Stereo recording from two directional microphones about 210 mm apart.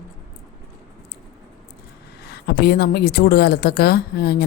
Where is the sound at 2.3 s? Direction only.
50° left (ahead or behind).